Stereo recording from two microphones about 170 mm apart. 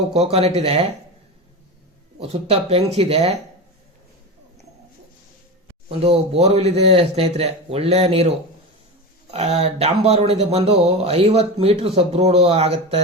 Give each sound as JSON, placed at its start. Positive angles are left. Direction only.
{"t": 0.1, "sound": "speech", "side_deg": -35}
{"t": 2.1, "sound": "speech", "side_deg": -35}
{"t": 6.1, "sound": "speech", "side_deg": -40}
{"t": 9.3, "sound": "speech", "side_deg": -40}